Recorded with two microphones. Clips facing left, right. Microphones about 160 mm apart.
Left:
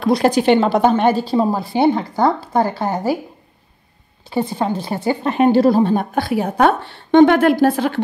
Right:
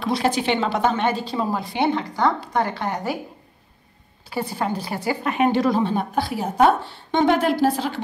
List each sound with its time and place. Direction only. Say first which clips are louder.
0.0 s a woman's voice: left 7 dB; 45° left (ahead or behind)
4.3 s a woman's voice: left 5 dB; 20° left (ahead or behind); by 8.0 s 55° left (ahead or behind)